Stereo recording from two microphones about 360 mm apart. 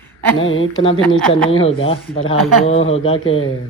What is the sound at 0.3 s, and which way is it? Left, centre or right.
Speech, left.